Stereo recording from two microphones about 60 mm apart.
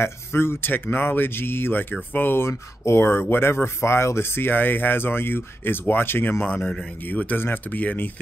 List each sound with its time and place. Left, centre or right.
0.0 s speech: left
2.4 s speech: left